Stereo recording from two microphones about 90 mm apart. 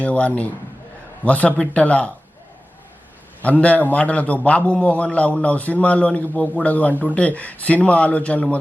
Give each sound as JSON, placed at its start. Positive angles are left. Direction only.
{"t": 0.0, "sound": "a man's voice", "side_deg": 15}
{"t": 3.6, "sound": "a man's voice", "side_deg": 15}